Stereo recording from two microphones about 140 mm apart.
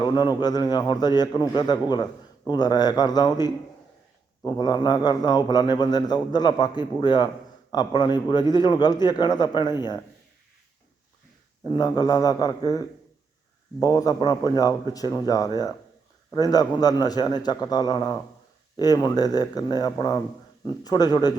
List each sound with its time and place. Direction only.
0.0 s a man's voice: 30° left (ahead or behind)
11.6 s a man's voice: 30° left (ahead or behind)